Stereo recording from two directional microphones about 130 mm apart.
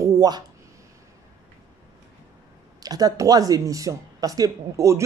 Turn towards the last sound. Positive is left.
turn(degrees=-25)  # may be behind; listen again after turning